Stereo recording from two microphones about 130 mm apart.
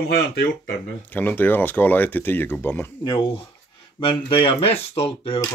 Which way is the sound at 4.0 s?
40° left (ahead or behind).